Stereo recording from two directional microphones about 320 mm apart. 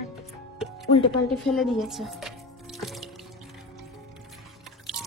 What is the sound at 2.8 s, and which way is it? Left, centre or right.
Music, centre.